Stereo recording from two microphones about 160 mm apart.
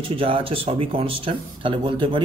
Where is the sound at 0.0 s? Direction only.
35° right (ahead or behind).